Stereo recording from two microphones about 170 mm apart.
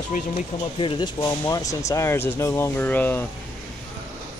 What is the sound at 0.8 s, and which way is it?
Speech, 25° left (ahead or behind).